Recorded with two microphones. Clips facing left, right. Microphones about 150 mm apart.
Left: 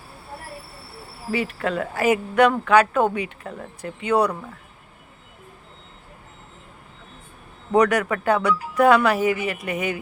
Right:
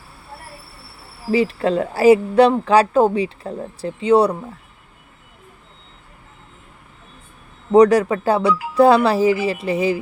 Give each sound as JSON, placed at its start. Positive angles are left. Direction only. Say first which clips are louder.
{"t": 1.3, "sound": "a woman's voice", "louder": "right 7 dB", "side_deg": -30}
{"t": 7.7, "sound": "a woman's voice", "louder": "right 7 dB", "side_deg": -35}